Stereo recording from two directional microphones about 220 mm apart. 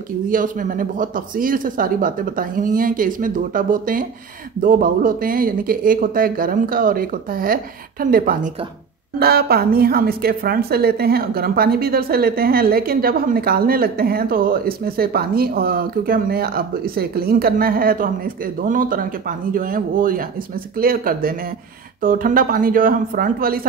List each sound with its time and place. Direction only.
0.3 s a woman's voice: 40° right (ahead or behind)